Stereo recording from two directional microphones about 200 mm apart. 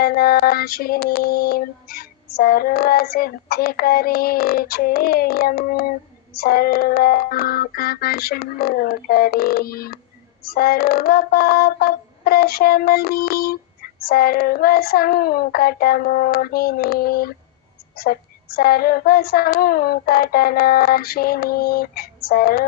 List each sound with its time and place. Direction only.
0.0 s female singing: 50° left (ahead or behind)